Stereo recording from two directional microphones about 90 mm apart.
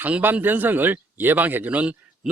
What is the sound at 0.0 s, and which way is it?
Speech, 20° right (ahead or behind).